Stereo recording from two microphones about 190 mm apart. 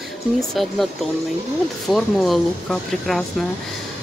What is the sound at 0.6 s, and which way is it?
Speech, centre (ahead or behind).